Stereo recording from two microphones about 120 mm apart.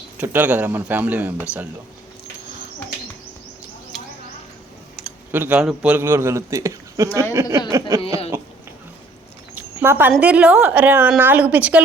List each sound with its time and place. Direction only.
0.2 s speech: 15° right (ahead or behind)
5.0 s a sound: 5° right (ahead or behind)
5.3 s a man's voice: 15° right (ahead or behind)
9.6 s speech: 20° right (ahead or behind)